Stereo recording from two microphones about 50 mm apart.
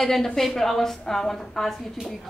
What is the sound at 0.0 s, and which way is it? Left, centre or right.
A woman's voice, centre.